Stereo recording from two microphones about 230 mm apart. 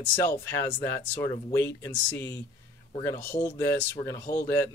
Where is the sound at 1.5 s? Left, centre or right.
Centre.